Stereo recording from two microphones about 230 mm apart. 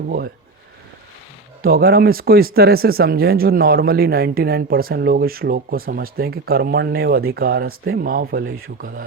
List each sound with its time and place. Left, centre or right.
1.6 s speech: right